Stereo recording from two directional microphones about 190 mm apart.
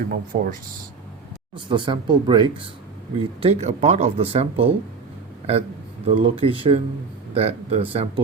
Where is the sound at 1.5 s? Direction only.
25° right (ahead or behind).